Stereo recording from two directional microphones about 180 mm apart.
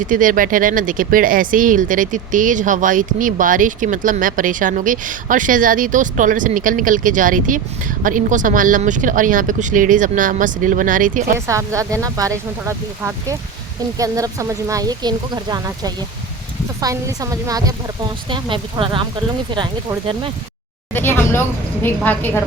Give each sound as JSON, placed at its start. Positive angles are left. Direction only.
{"t": 0.1, "sound": "speech", "side_deg": -50}
{"t": 11.3, "sound": "speech", "side_deg": -15}
{"t": 20.9, "sound": "a woman's voice", "side_deg": 10}